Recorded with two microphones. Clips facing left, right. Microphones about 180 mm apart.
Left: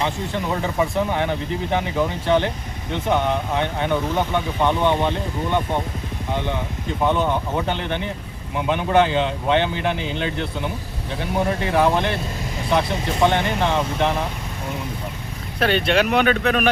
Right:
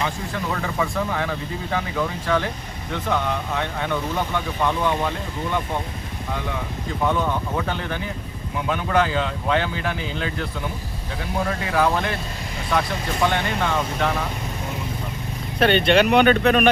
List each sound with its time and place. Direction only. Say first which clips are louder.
0.0 s speech: left 2 dB; 25° left (ahead or behind)
7.0 s speech: left 2 dB; 25° left (ahead or behind)
15.5 s speech: right 2 dB; centre (ahead or behind)